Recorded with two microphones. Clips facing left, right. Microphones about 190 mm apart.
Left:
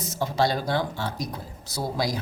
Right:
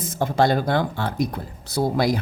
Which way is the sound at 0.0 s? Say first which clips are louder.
Right 4 dB; 55° right (ahead or behind).